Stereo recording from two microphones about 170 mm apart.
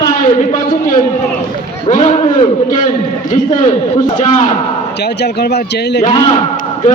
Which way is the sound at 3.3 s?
50° left (ahead or behind).